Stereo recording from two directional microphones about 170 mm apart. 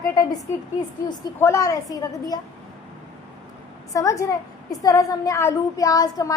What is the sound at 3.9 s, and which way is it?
A woman's voice, 20° left (ahead or behind).